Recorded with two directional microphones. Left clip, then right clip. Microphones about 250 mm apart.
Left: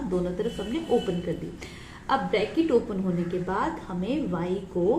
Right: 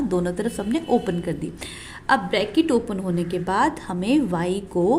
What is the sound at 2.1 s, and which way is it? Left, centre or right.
A woman's voice, right.